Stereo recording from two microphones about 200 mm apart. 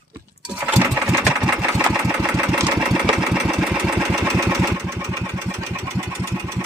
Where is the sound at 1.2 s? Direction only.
Centre (ahead or behind).